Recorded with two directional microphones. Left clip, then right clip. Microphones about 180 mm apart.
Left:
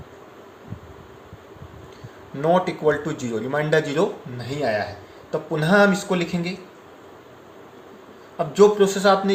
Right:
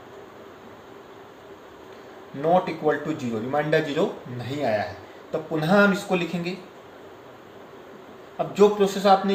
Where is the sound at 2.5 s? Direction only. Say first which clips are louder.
Left 2 dB; 60° left (ahead or behind).